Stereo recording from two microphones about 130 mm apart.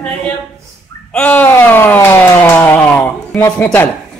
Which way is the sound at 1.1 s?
10° left (ahead or behind).